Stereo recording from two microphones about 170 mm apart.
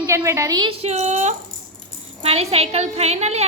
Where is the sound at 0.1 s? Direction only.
15° right (ahead or behind).